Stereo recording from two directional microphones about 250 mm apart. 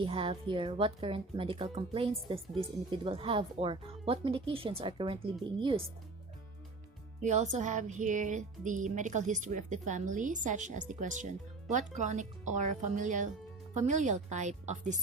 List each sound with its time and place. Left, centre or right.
0.0 s music: right
7.2 s music: right